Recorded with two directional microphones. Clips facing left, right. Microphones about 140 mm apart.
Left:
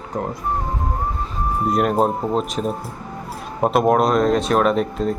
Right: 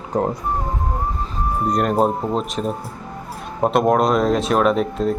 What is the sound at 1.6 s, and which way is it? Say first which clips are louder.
Speech: even; 5° left (ahead or behind).